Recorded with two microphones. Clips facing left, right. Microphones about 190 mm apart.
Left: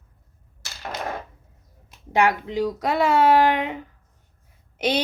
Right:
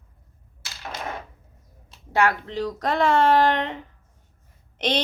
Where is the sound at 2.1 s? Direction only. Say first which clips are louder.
Left 2 dB; 15° left (ahead or behind).